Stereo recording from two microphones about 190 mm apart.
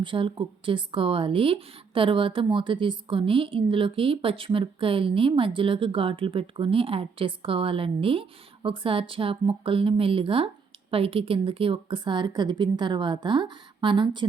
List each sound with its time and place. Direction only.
0.0 s speech: 25° right (ahead or behind)